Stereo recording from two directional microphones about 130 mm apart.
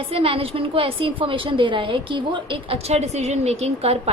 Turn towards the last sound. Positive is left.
turn(degrees=-55)  # may be behind; listen again after turning